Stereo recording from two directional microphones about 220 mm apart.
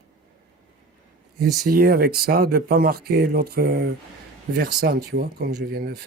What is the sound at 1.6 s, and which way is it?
Speech, 40° right (ahead or behind).